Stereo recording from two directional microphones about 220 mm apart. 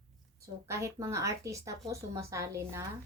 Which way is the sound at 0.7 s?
15° right (ahead or behind).